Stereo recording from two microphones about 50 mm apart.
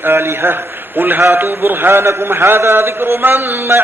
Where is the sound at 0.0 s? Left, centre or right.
Right.